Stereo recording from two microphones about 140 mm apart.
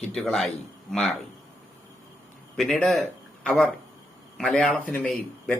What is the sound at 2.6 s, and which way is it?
Speech, centre (ahead or behind).